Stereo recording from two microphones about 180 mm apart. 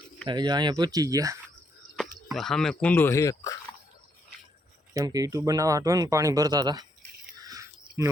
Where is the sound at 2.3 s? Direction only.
Centre (ahead or behind); by 3.5 s 20° left (ahead or behind).